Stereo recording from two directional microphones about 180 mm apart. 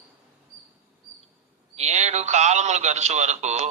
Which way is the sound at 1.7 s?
40° right (ahead or behind).